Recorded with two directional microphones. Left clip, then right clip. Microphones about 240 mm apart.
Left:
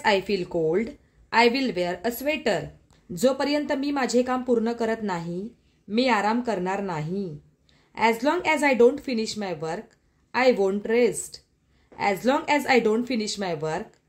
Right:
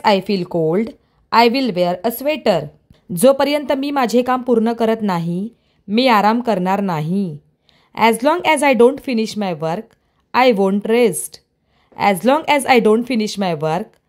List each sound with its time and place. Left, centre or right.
0.0 s a woman's voice: right